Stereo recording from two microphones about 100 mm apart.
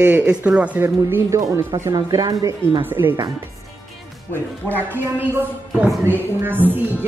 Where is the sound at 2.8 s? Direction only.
20° right (ahead or behind).